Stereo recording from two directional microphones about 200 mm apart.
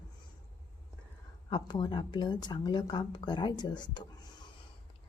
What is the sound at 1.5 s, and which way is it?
Speech, 20° left (ahead or behind).